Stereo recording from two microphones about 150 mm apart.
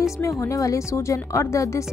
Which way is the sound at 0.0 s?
20° left (ahead or behind).